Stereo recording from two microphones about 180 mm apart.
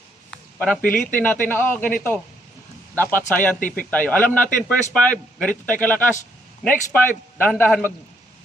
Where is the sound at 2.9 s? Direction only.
10° left (ahead or behind).